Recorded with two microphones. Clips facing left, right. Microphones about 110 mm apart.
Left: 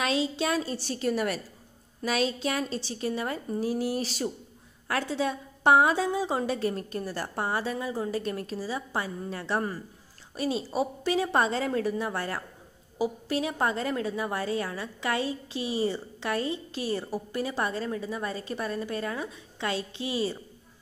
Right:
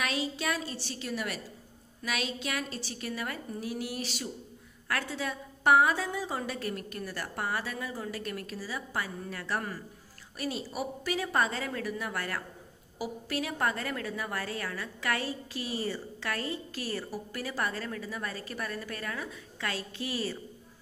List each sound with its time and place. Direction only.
0.0 s a woman's voice: 25° left (ahead or behind)
0.7 s a woman's voice: 45° left (ahead or behind)
2.0 s a woman's voice: 35° left (ahead or behind)
4.8 s a woman's voice: 25° left (ahead or behind)